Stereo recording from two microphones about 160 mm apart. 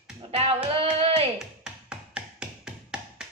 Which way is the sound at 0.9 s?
40° right (ahead or behind).